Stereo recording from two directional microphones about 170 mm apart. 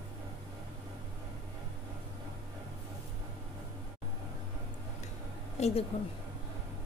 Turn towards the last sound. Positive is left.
turn(degrees=35)  # may be behind; listen again after turning